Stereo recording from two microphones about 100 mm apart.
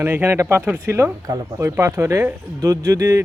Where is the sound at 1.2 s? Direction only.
35° right (ahead or behind).